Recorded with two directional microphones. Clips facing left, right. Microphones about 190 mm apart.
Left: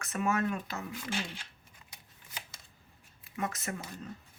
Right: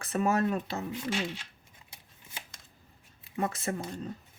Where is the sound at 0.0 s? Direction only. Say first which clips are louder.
Right 4 dB; 35° right (ahead or behind).